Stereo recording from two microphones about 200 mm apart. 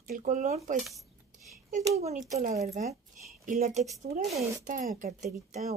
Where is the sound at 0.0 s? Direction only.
40° right (ahead or behind).